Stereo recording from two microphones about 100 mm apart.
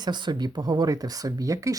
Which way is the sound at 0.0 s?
45° right (ahead or behind).